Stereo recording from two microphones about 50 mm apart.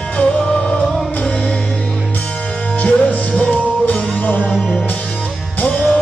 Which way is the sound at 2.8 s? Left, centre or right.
Left.